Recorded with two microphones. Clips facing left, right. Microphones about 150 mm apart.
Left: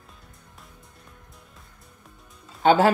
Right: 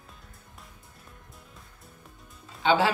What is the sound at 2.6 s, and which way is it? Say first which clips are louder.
Speech: left 5 dB; 50° left (ahead or behind).